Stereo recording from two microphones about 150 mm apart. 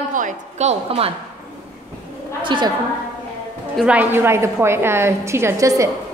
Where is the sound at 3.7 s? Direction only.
10° right (ahead or behind).